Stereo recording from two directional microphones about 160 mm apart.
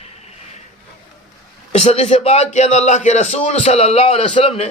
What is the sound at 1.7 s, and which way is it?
A man's voice, 40° left (ahead or behind).